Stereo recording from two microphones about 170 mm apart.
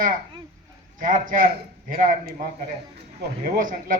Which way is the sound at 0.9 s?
50° right (ahead or behind).